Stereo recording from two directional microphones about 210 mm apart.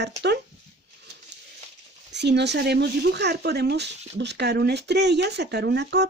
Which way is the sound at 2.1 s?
55° right (ahead or behind).